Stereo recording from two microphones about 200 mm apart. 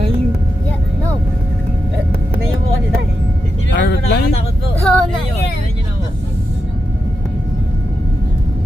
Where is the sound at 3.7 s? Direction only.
55° left (ahead or behind).